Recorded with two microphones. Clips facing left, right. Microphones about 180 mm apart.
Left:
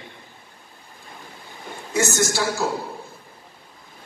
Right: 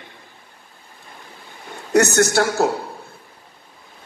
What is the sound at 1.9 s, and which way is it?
Speech, 65° right (ahead or behind).